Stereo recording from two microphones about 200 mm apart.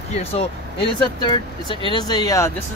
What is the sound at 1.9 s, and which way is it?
Speech, 20° left (ahead or behind).